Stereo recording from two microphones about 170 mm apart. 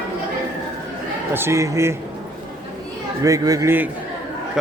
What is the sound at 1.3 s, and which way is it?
Speech, 15° right (ahead or behind).